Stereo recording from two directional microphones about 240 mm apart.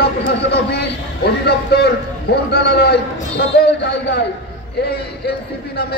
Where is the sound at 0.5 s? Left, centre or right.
Left.